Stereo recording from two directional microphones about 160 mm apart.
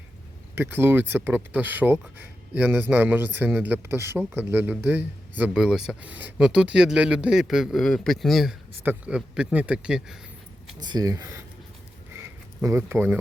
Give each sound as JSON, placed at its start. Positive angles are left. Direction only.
{"t": 0.5, "sound": "speech", "side_deg": -15}
{"t": 10.8, "sound": "speech", "side_deg": -25}
{"t": 12.6, "sound": "speech", "side_deg": -15}